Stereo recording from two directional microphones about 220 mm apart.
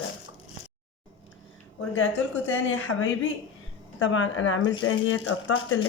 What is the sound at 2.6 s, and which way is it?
Speech, 65° left (ahead or behind).